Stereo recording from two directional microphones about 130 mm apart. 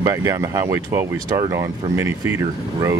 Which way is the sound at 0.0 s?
25° right (ahead or behind).